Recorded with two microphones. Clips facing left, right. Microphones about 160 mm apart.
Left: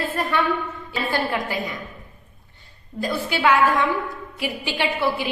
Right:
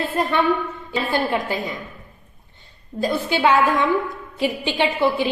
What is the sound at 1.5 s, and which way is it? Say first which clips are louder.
Speech: right 2 dB; 25° right (ahead or behind).